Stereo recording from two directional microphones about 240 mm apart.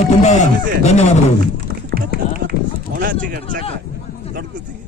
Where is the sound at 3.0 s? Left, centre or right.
Right.